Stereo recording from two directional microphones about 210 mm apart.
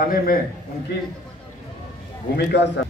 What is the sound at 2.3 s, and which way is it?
Speech, 55° left (ahead or behind).